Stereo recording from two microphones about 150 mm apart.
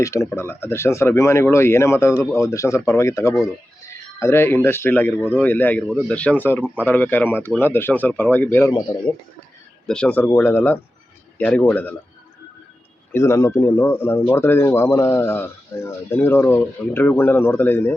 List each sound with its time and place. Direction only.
0.0 s speech: 20° left (ahead or behind)
8.7 s speech: 30° left (ahead or behind)
9.8 s speech: 5° left (ahead or behind)
13.1 s speech: 20° left (ahead or behind)